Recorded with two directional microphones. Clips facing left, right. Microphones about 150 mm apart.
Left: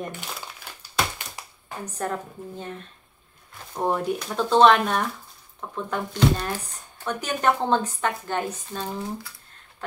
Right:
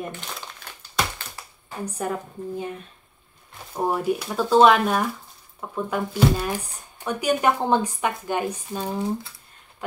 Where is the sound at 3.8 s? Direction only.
5° right (ahead or behind).